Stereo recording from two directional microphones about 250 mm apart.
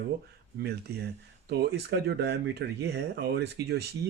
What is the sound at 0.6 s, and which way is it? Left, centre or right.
Speech, right.